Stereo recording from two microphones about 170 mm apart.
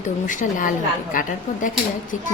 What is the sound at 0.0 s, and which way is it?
A woman's voice, 50° left (ahead or behind).